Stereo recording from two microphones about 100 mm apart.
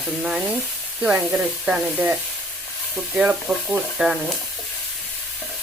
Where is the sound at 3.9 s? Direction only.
5° right (ahead or behind).